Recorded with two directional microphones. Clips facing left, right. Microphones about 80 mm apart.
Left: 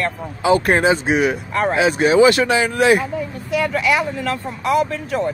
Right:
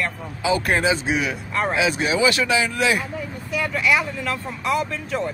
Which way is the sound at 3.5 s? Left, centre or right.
Left.